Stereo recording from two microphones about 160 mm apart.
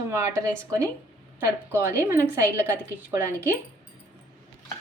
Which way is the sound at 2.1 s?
15° right (ahead or behind).